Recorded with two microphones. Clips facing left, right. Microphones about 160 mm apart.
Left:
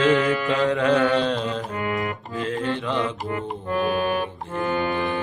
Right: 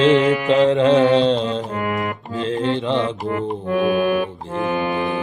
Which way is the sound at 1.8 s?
45° right (ahead or behind).